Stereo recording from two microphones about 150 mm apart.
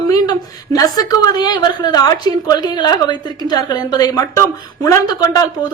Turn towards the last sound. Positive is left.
turn(degrees=25)  # may be behind; listen again after turning